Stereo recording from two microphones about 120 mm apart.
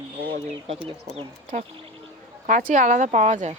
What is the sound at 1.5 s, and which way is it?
Speech, 90° right.